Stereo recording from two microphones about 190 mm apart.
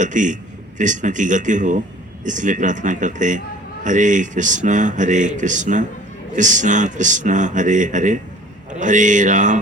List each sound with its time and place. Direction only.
0.0 s speech: 40° right (ahead or behind)